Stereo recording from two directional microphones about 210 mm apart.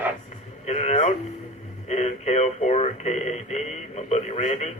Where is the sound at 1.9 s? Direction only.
30° left (ahead or behind).